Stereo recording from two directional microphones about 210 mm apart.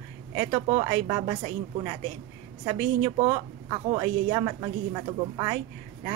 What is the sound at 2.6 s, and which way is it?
A woman's voice, 20° right (ahead or behind).